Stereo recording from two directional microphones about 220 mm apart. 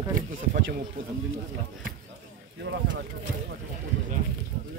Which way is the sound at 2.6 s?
50° right (ahead or behind).